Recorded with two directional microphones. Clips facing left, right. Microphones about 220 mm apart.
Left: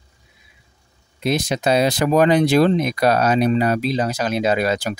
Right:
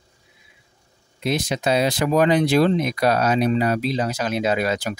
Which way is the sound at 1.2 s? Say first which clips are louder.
Left 2 dB; 40° left (ahead or behind).